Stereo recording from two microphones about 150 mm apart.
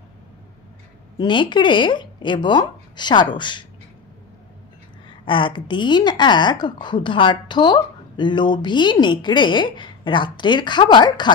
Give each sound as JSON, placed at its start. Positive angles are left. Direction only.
{"t": 1.1, "sound": "a woman's voice", "side_deg": 30}
{"t": 5.2, "sound": "a woman's voice", "side_deg": 35}